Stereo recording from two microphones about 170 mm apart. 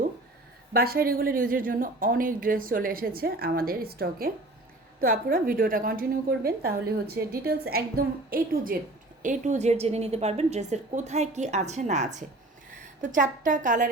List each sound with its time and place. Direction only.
0.7 s a woman's voice: 60° right (ahead or behind)
9.2 s a woman's voice: 45° right (ahead or behind)